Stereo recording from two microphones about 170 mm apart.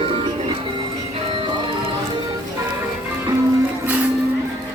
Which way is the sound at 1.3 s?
30° right (ahead or behind).